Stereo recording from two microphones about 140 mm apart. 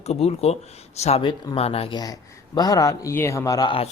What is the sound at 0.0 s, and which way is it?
Speech, 50° left (ahead or behind).